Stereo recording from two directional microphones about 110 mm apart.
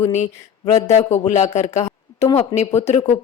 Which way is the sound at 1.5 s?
90° left.